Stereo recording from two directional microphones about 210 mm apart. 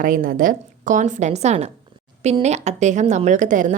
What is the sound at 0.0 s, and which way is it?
A woman's voice, 40° right (ahead or behind).